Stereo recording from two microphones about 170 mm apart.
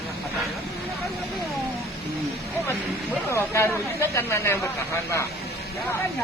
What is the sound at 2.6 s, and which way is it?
Speech, 15° left (ahead or behind).